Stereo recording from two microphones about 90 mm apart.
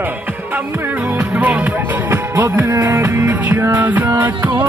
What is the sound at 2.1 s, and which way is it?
Music, 30° right (ahead or behind).